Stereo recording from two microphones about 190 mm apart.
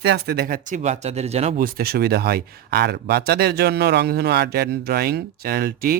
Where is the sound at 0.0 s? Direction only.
60° right (ahead or behind); by 1.6 s 35° right (ahead or behind).